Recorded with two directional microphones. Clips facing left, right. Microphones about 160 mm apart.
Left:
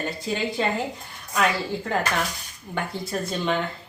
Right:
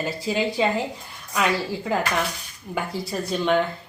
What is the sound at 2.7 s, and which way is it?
Speech, centre (ahead or behind).